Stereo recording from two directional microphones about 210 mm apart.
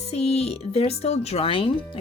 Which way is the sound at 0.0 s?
30° left (ahead or behind).